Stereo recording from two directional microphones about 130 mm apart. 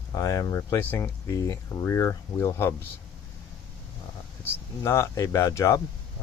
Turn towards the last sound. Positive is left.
turn(degrees=25)  # may be behind; listen again after turning